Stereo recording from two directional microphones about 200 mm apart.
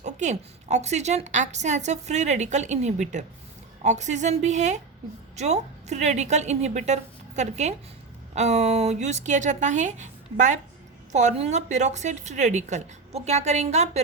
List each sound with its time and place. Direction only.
0.0 s a woman's voice: 35° right (ahead or behind)